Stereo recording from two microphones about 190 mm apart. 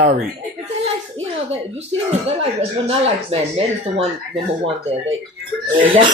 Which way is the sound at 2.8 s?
30° right (ahead or behind).